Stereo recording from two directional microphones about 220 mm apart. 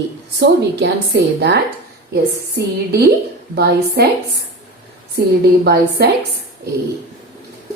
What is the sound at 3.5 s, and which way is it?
Speech, 45° right (ahead or behind).